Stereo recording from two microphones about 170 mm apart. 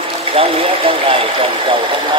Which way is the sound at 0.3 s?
35° right (ahead or behind).